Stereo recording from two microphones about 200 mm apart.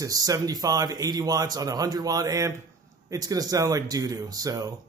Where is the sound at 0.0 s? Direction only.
15° right (ahead or behind).